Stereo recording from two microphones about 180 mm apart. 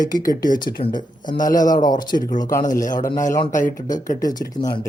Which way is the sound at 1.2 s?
45° left (ahead or behind).